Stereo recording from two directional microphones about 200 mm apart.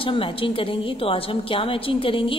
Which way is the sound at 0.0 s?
25° left (ahead or behind).